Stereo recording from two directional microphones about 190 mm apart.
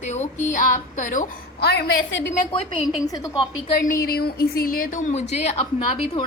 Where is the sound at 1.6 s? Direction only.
60° left (ahead or behind).